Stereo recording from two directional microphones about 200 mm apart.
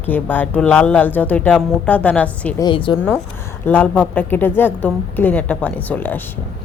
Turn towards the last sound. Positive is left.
turn(degrees=10)  # may be behind; listen again after turning